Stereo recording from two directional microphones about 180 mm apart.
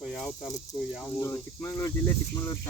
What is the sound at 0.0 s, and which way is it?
Speech, centre (ahead or behind).